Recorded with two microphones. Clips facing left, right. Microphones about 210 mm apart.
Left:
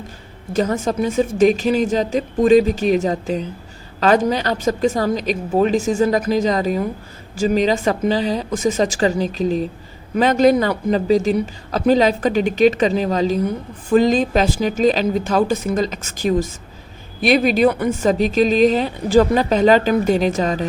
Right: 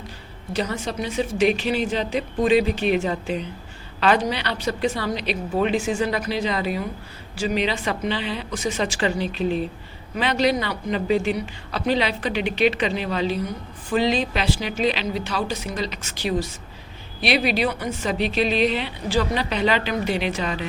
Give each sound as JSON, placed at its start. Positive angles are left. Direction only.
{"t": 0.5, "sound": "speech", "side_deg": 45}